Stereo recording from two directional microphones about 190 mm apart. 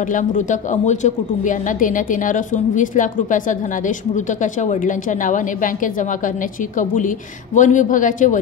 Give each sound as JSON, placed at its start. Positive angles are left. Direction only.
{"t": 0.1, "sound": "a woman's voice", "side_deg": 40}